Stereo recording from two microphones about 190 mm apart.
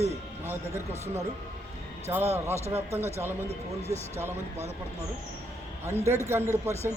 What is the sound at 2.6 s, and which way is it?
Speech, 35° right (ahead or behind).